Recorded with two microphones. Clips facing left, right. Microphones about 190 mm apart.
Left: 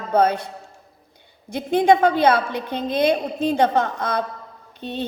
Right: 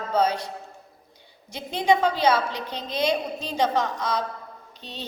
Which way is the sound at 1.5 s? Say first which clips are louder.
Left 6 dB; 55° left (ahead or behind).